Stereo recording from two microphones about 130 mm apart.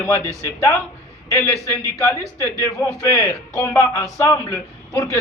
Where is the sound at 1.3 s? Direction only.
20° left (ahead or behind).